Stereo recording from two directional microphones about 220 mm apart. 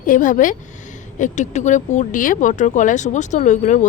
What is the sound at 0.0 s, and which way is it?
Speech, 35° left (ahead or behind).